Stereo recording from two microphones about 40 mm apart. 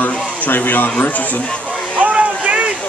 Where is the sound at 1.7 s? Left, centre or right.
Right.